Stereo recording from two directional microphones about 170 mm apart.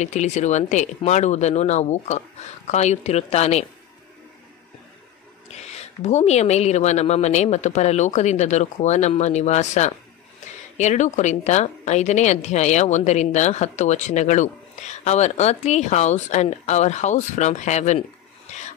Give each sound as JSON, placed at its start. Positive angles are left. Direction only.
{"t": 0.0, "sound": "speech", "side_deg": 45}
{"t": 5.5, "sound": "a woman's voice", "side_deg": 40}